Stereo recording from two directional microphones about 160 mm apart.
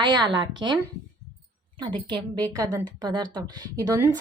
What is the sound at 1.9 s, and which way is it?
A woman's voice, 30° right (ahead or behind).